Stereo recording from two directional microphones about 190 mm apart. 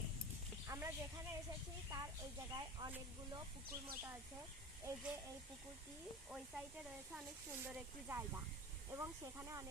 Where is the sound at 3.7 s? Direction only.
15° right (ahead or behind).